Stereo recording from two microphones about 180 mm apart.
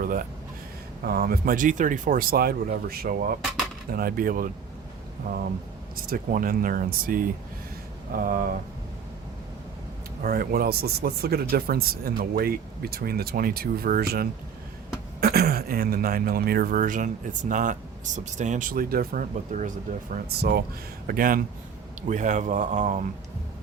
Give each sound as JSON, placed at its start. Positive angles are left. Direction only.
{"t": 0.0, "sound": "a sound", "side_deg": -50}
{"t": 1.0, "sound": "speech", "side_deg": -60}
{"t": 6.1, "sound": "speech", "side_deg": -50}
{"t": 10.2, "sound": "speech", "side_deg": -55}
{"t": 20.1, "sound": "speech", "side_deg": -55}